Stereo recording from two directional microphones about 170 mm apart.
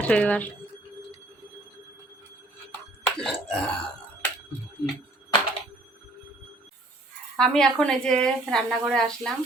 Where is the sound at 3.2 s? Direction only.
5° left (ahead or behind).